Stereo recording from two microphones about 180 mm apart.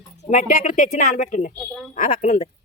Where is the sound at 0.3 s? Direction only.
45° left (ahead or behind).